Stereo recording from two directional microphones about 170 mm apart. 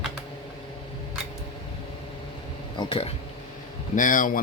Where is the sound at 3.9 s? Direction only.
50° left (ahead or behind).